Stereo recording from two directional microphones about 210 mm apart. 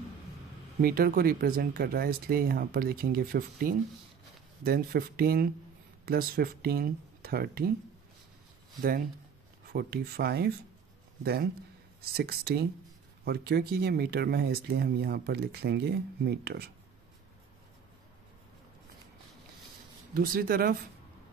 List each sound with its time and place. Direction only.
0.7 s speech: 45° right (ahead or behind)
9.7 s speech: 50° right (ahead or behind)
12.2 s speech: 50° right (ahead or behind)
20.2 s speech: 45° right (ahead or behind)